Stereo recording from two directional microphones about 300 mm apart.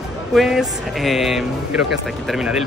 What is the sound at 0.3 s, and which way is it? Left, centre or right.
Speech, centre.